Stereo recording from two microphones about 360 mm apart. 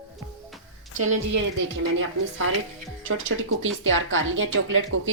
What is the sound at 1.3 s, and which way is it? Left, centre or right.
Speech, right.